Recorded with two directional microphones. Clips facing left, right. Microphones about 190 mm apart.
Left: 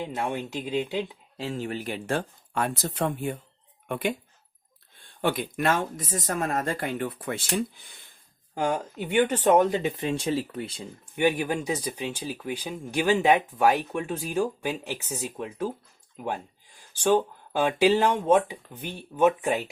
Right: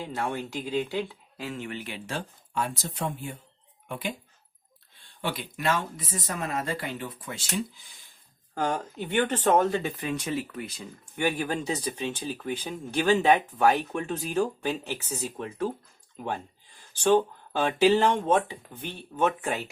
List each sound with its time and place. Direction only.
0.0 s speech: 20° left (ahead or behind); by 4.1 s 60° left (ahead or behind)
5.2 s speech: 50° left (ahead or behind)
8.5 s speech: 10° left (ahead or behind); by 10.8 s 30° left (ahead or behind)
11.0 s speech: 15° left (ahead or behind)